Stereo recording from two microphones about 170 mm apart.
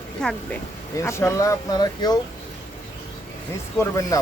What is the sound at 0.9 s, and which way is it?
Speech, 15° left (ahead or behind).